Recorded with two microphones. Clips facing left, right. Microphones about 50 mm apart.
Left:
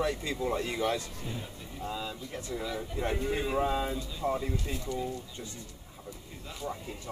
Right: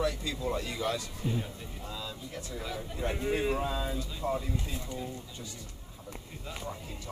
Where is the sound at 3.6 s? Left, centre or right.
Left.